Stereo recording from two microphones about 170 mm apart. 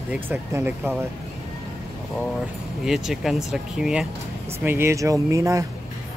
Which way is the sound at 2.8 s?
Centre (ahead or behind).